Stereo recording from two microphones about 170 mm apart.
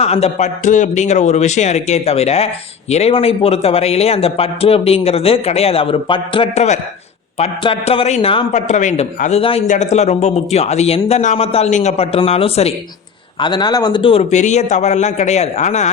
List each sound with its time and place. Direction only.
0.0 s a man's voice: 40° left (ahead or behind)
8.6 s a man's voice: 45° left (ahead or behind)